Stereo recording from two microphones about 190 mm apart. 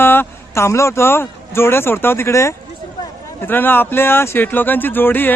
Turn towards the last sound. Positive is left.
turn(degrees=10)  # may be behind; listen again after turning